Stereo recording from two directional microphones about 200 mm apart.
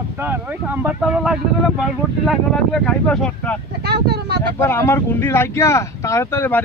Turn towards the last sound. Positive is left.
turn(degrees=10)  # may be behind; listen again after turning